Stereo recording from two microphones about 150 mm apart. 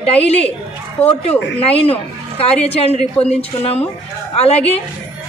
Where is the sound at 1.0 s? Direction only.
45° left (ahead or behind).